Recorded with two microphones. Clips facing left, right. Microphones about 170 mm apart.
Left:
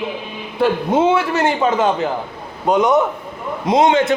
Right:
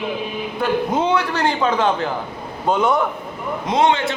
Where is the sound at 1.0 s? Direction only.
5° left (ahead or behind).